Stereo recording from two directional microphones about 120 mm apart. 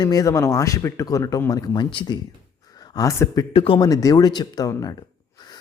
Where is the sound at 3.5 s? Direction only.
50° left (ahead or behind).